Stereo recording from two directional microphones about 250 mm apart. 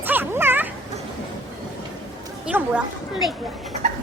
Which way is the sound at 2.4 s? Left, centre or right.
Centre.